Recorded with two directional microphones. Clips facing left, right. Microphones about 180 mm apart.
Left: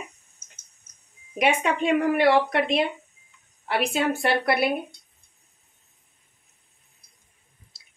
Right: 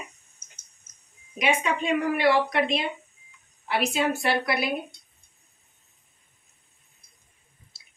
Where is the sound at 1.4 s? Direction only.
60° left (ahead or behind).